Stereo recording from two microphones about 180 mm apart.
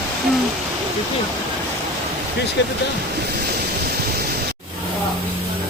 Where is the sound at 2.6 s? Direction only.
75° left (ahead or behind).